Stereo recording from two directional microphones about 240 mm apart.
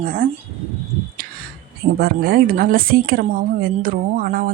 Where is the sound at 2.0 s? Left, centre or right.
Right.